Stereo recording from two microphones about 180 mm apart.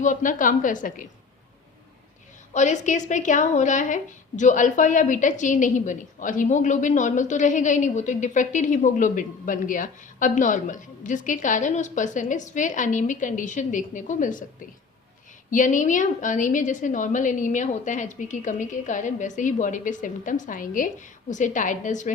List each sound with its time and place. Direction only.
0.0 s a woman's voice: 45° left (ahead or behind)
2.5 s a woman's voice: 40° left (ahead or behind)
15.4 s a woman's voice: 45° left (ahead or behind)